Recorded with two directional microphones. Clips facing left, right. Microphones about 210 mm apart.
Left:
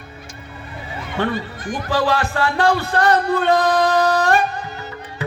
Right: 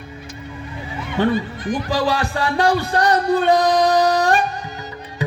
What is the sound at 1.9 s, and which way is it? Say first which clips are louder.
Music: left 3 dB; 15° right (ahead or behind).